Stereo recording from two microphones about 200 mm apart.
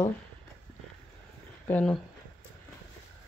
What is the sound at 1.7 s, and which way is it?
Speech, 5° left (ahead or behind).